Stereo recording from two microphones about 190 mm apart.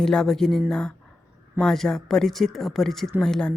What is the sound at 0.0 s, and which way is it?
Speech, 5° left (ahead or behind).